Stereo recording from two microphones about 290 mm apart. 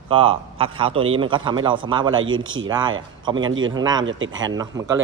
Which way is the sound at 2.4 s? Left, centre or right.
Right.